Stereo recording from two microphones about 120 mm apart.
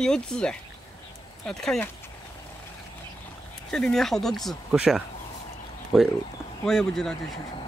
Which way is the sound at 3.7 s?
5° left (ahead or behind).